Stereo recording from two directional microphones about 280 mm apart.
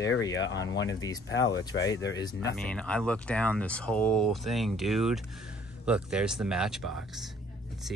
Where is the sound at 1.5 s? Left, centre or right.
Centre.